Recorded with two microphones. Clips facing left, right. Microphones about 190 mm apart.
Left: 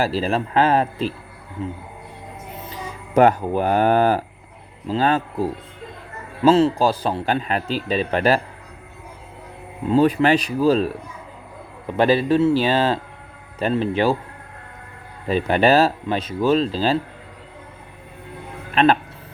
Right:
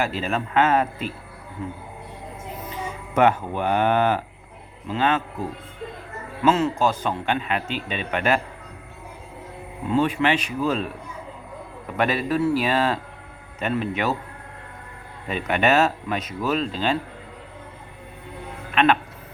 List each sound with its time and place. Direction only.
0.0 s a man's voice: 35° left (ahead or behind)
2.6 s a man's voice: 35° left (ahead or behind)
9.9 s a man's voice: 35° left (ahead or behind)
11.9 s a man's voice: 30° left (ahead or behind)
15.3 s a man's voice: 35° left (ahead or behind)
18.7 s speech: 35° left (ahead or behind)